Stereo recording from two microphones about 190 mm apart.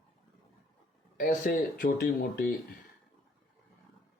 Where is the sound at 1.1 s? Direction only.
50° left (ahead or behind).